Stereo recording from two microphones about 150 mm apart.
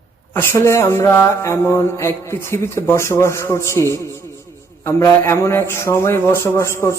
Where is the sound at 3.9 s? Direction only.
20° left (ahead or behind).